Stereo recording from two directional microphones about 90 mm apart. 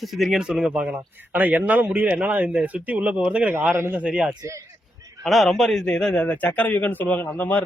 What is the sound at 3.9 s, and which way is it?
Speech, 10° right (ahead or behind).